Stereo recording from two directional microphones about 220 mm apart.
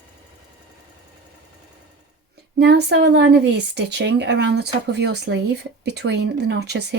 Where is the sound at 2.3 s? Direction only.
50° right (ahead or behind).